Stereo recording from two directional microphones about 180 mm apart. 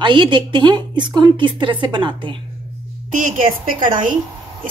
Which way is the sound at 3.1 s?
45° right (ahead or behind).